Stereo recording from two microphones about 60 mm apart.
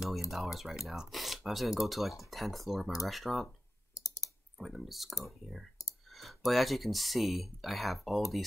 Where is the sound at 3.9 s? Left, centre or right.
Left.